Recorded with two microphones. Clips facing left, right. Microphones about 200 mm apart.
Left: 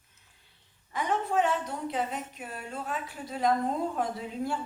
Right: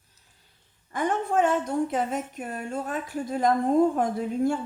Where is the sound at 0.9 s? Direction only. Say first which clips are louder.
Right 3 dB; 50° right (ahead or behind).